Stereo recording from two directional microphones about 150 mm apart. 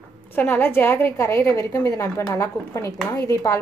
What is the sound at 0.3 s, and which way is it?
A woman's voice, 10° left (ahead or behind).